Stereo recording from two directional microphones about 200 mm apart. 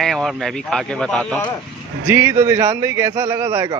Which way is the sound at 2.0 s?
10° right (ahead or behind).